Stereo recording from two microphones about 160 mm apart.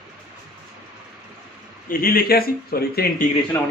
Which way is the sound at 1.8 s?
65° left (ahead or behind).